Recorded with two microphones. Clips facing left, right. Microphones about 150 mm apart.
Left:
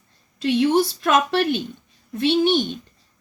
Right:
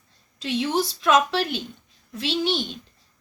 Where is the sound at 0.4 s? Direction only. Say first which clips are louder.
Left 6 dB; 55° left (ahead or behind).